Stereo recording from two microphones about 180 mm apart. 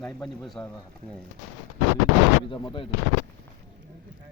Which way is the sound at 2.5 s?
25° left (ahead or behind).